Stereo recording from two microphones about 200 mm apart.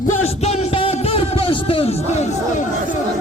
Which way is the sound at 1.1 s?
30° left (ahead or behind).